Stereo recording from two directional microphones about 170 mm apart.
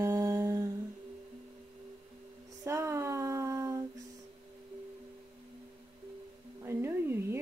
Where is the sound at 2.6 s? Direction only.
15° right (ahead or behind).